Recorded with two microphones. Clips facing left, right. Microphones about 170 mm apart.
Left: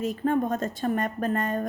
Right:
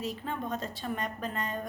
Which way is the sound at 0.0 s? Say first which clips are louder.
Left 10 dB; 50° left (ahead or behind).